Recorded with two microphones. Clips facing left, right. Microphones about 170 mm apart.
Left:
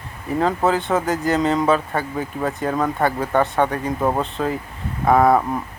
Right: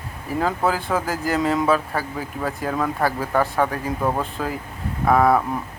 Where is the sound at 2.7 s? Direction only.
20° left (ahead or behind).